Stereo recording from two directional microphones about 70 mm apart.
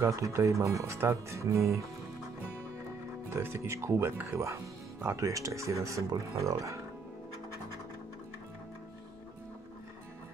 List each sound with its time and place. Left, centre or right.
0.0 s speech: right
3.4 s speech: right